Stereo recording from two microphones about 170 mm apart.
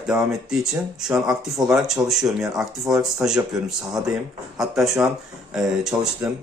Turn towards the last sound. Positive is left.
turn(degrees=-5)  # may be behind; listen again after turning